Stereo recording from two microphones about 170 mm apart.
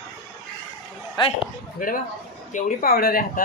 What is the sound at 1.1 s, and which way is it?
Speech, 30° left (ahead or behind).